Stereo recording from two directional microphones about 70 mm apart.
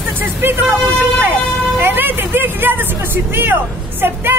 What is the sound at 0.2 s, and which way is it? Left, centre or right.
Speech, right.